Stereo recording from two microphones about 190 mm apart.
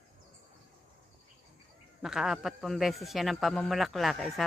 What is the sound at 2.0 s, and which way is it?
A man's voice, 5° right (ahead or behind).